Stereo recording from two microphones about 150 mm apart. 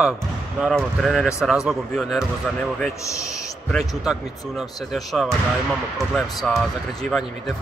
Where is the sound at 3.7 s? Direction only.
Centre (ahead or behind).